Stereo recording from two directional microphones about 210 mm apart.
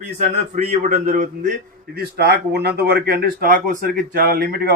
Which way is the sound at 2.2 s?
50° right (ahead or behind).